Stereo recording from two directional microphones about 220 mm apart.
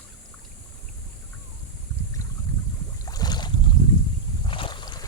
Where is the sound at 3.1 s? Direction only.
20° left (ahead or behind).